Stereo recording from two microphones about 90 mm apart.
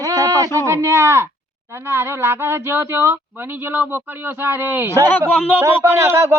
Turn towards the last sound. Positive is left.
turn(degrees=-30)  # may be behind; listen again after turning